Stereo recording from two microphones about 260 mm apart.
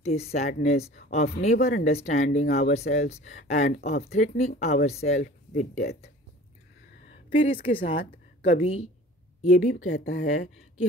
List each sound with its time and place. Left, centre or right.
0.0 s speech: left
7.2 s a woman's voice: left
9.8 s speech: left